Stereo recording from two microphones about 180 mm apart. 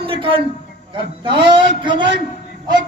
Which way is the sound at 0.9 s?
30° right (ahead or behind).